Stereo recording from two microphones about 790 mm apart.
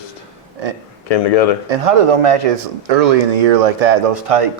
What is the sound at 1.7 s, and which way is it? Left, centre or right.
Speech, right.